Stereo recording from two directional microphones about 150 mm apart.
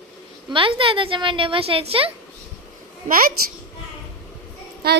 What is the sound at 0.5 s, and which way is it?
A woman's voice, 35° right (ahead or behind).